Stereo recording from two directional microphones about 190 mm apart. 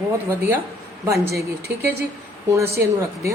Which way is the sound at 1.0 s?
15° right (ahead or behind).